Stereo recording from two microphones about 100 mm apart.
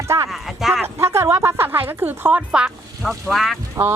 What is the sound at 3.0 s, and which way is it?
Speech, centre (ahead or behind).